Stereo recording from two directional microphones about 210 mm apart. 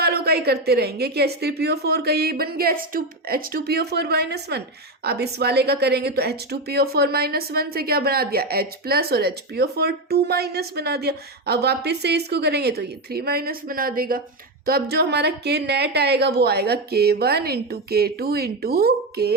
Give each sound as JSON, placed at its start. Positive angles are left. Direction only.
{"t": 0.0, "sound": "a woman's voice", "side_deg": -50}